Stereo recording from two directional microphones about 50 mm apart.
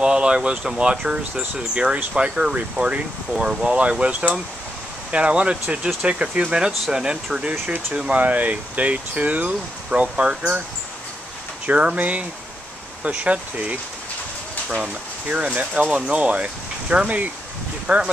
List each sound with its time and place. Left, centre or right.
0.0 s speech: centre
8.2 s speech: right
11.6 s speech: right
15.2 s speech: right